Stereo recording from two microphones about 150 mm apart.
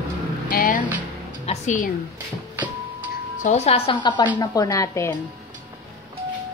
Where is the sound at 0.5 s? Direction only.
65° left (ahead or behind).